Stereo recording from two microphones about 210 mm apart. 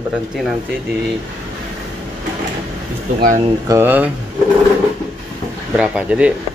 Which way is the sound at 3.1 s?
40° right (ahead or behind).